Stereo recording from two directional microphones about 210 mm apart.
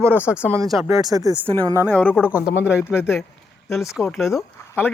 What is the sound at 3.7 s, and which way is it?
Speech, centre (ahead or behind).